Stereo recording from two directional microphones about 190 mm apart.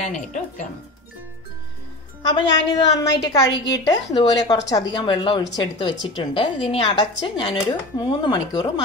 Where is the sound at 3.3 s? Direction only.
20° left (ahead or behind).